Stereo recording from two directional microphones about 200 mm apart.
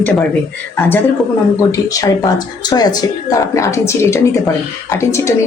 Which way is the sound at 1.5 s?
15° left (ahead or behind).